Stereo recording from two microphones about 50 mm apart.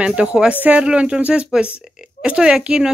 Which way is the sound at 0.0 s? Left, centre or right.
Centre.